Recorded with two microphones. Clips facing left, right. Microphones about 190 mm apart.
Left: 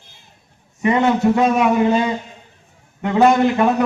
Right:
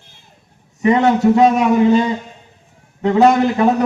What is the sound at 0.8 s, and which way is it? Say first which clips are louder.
Speech: right 3 dB; 40° right (ahead or behind).